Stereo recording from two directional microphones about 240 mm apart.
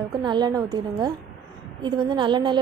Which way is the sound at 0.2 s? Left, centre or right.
Centre.